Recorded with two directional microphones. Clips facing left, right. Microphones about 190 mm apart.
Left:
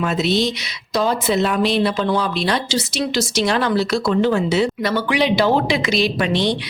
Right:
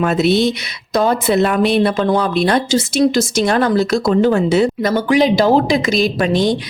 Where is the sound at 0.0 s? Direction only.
55° right (ahead or behind).